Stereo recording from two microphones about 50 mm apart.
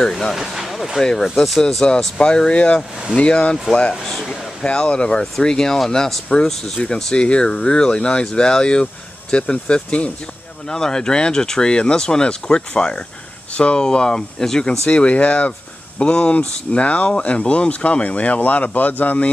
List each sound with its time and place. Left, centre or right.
0.3 s speech: centre; by 3.5 s left
4.0 s speech: centre
4.6 s speech: left
5.2 s speech: centre
10.7 s speech: centre
14.9 s speech: left